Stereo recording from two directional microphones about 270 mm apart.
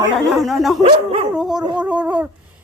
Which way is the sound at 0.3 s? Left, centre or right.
Centre.